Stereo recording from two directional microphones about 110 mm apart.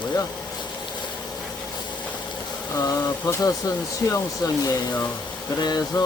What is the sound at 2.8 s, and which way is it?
Speech, 35° left (ahead or behind).